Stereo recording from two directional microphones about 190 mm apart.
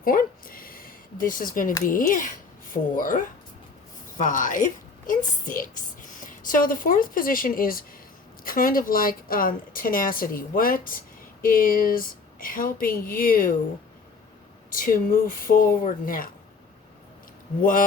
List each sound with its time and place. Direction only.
0.0 s speech: 50° left (ahead or behind)
4.2 s a woman's voice: 45° left (ahead or behind)
14.7 s a woman's voice: 50° left (ahead or behind)
17.6 s a woman's voice: 45° left (ahead or behind)